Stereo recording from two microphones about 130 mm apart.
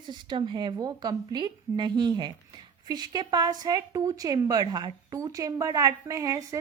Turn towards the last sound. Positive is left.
turn(degrees=-25)  # may be behind; listen again after turning